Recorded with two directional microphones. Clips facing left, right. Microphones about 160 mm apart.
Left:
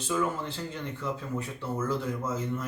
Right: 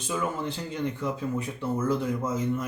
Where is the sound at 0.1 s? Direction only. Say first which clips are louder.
Even; 15° right (ahead or behind).